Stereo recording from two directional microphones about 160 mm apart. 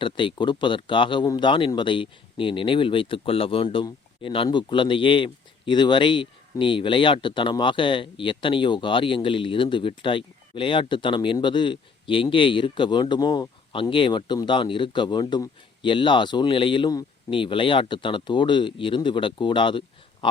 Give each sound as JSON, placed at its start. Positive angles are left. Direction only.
{"t": 0.0, "sound": "speech", "side_deg": 30}